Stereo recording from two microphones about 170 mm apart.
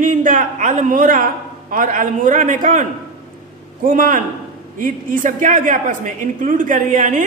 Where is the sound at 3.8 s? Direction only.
55° right (ahead or behind).